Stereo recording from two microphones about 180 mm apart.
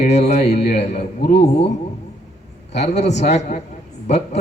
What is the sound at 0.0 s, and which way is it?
A man's voice, 40° left (ahead or behind).